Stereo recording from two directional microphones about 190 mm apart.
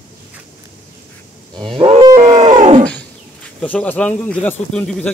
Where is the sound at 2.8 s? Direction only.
5° left (ahead or behind).